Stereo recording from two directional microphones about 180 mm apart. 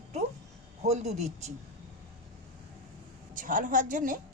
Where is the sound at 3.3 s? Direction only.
50° right (ahead or behind).